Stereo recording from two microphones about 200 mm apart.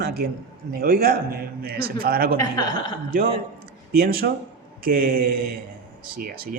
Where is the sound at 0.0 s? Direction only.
55° right (ahead or behind).